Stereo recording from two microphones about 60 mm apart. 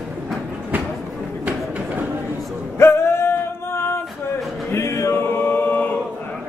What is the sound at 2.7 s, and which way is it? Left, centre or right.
Music, left.